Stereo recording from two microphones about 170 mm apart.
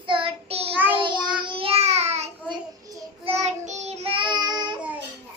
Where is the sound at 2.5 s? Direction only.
20° right (ahead or behind).